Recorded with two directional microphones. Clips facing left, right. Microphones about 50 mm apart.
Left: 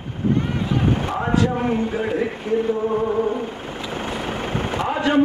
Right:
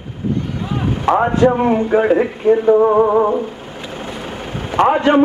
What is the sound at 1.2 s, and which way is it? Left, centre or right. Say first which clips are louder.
Speech: right 4 dB; right.